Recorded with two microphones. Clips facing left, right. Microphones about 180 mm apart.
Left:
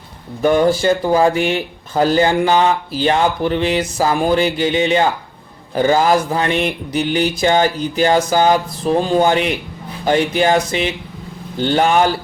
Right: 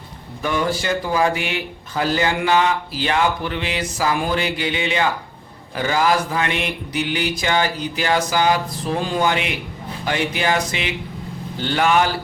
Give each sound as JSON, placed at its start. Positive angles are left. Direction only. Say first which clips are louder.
{"t": 0.4, "sound": "speech", "louder": "left 9 dB", "side_deg": 40}
{"t": 0.7, "sound": "speech", "louder": "left 8 dB", "side_deg": 30}
{"t": 1.4, "sound": "speech", "louder": "left 8 dB", "side_deg": 40}